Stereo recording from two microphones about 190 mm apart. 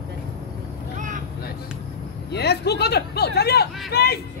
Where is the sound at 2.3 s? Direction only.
60° left (ahead or behind).